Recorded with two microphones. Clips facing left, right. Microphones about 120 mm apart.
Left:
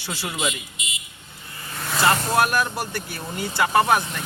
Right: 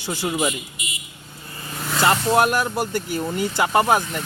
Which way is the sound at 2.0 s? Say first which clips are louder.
Right 2 dB; 20° right (ahead or behind).